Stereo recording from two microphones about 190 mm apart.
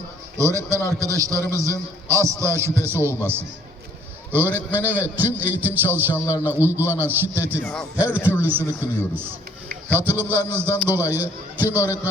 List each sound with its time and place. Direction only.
0.3 s a man's voice: 15° right (ahead or behind)
6.1 s a man's voice: 15° left (ahead or behind)
6.4 s a man's voice: 10° right (ahead or behind)
7.6 s a man's voice: 5° left (ahead or behind)
7.9 s a man's voice: 10° right (ahead or behind)